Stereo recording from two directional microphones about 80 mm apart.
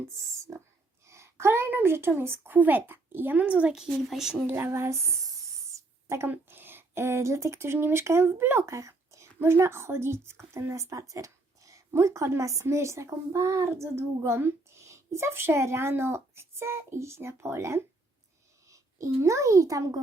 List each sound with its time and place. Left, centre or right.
0.5 s oink: right
1.0 s a woman's voice: right; by 3.8 s centre
3.8 s speech: centre
4.4 s speech: right
6.2 s a child's voice: right